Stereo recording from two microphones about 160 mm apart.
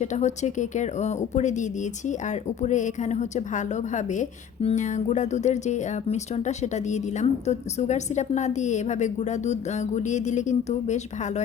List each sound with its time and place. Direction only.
0.0 s speech: 45° left (ahead or behind)